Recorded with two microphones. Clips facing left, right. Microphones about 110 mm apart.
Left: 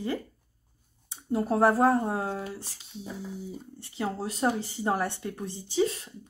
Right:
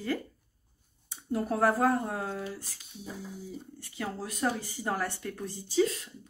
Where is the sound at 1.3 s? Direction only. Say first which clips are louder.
Left 4 dB; 25° left (ahead or behind).